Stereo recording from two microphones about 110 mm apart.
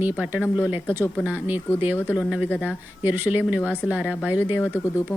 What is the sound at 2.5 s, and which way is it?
Speech, 15° left (ahead or behind).